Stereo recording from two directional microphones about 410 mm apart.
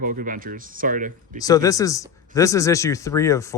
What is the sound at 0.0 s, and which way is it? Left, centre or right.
Speech, centre.